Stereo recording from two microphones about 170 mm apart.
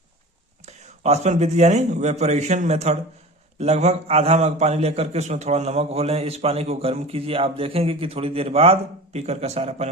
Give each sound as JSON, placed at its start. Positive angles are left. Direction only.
{"t": 0.6, "sound": "a man's voice", "side_deg": -40}